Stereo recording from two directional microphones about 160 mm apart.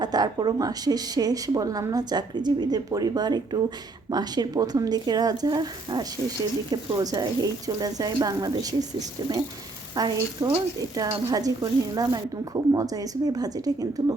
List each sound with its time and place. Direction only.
0.0 s a woman's voice: 25° right (ahead or behind)